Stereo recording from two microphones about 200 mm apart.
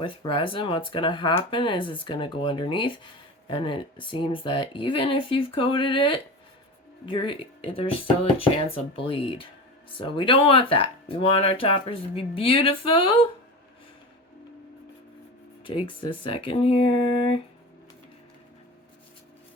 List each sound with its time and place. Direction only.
0.0 s speech: 25° left (ahead or behind)
15.6 s speech: 25° left (ahead or behind)